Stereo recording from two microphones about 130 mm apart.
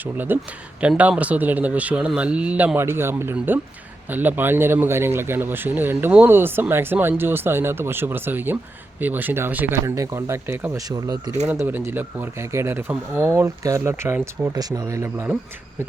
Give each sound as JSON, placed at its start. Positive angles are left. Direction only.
{"t": 0.0, "sound": "speech", "side_deg": -15}
{"t": 14.5, "sound": "speech", "side_deg": -30}